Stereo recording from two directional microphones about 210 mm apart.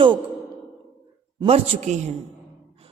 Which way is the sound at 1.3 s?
30° right (ahead or behind).